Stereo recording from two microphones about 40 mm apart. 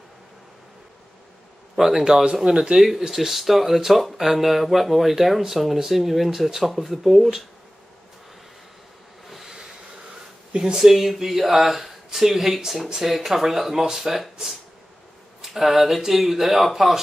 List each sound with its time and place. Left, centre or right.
1.8 s speech: centre
2.4 s speech: centre
3.1 s speech: centre
9.3 s train: centre
10.5 s speech: centre